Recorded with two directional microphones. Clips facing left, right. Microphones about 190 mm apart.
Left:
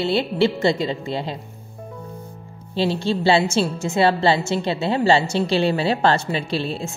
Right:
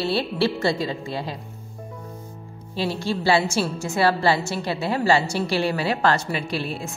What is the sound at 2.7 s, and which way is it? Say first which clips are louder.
A woman's voice: left 4 dB; 25° left (ahead or behind).